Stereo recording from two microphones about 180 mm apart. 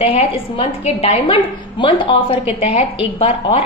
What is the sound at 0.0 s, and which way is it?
A woman's voice, 30° left (ahead or behind).